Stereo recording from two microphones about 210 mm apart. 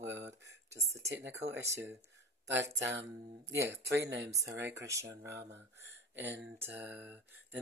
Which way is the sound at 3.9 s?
60° right (ahead or behind).